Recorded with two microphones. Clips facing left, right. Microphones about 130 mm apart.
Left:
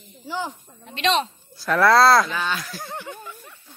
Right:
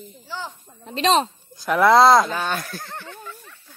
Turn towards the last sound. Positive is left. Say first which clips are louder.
# left 1 dB
turn(degrees=15)  # may be behind; listen again after turning